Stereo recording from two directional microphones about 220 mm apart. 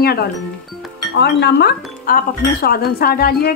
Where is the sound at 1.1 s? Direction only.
50° left (ahead or behind).